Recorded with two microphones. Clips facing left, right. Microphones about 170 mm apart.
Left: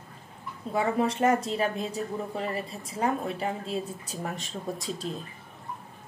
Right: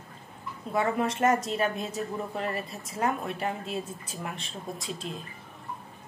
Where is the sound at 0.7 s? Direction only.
30° left (ahead or behind).